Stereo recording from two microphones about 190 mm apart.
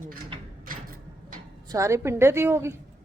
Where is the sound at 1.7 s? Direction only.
15° right (ahead or behind).